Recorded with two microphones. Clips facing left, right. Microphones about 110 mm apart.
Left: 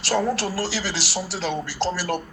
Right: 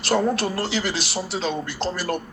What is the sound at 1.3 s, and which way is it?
Speech, 90° left.